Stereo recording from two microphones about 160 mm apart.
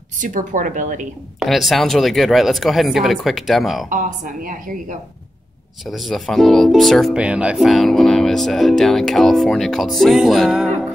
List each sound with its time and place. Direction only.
0.2 s a woman's voice: 55° right (ahead or behind)
1.4 s speech: centre (ahead or behind)
3.9 s a woman's voice: 60° right (ahead or behind)
5.9 s speech: centre (ahead or behind)